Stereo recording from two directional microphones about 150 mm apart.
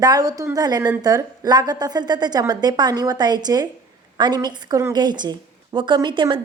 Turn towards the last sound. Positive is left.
turn(degrees=-30)  # may be behind; listen again after turning